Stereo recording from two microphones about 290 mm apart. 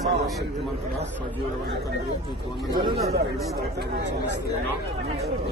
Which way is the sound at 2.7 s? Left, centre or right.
Centre.